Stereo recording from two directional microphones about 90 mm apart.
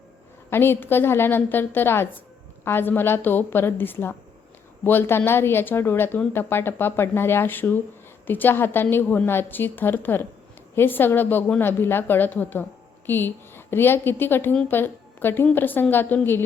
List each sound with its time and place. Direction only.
0.5 s a woman's voice: 25° left (ahead or behind)